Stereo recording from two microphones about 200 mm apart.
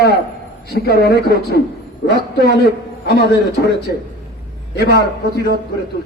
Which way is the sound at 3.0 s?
55° left (ahead or behind).